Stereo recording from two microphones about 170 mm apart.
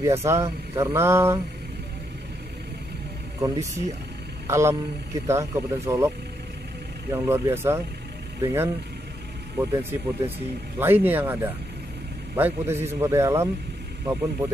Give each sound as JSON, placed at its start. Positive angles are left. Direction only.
{"t": 0.0, "sound": "speech", "side_deg": -15}
{"t": 3.3, "sound": "speech", "side_deg": -20}